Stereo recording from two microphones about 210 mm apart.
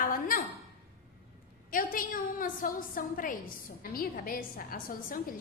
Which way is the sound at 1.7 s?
40° left (ahead or behind).